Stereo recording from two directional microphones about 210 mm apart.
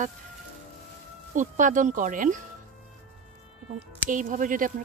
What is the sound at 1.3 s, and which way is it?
Speech, 35° right (ahead or behind).